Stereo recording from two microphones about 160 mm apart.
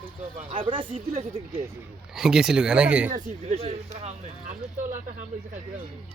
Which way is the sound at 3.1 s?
40° right (ahead or behind).